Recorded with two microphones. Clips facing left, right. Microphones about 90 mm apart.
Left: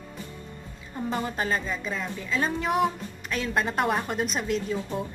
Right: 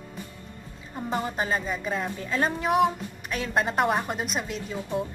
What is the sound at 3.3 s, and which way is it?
Speech, 25° right (ahead or behind).